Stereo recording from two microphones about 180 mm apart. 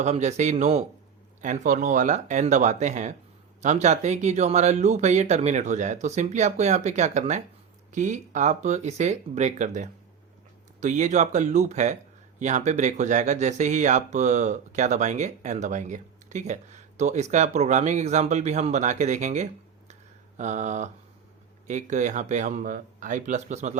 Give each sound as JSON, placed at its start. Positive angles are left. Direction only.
{"t": 0.0, "sound": "speech", "side_deg": -40}
{"t": 19.9, "sound": "a sound", "side_deg": -40}
{"t": 21.7, "sound": "speech", "side_deg": -40}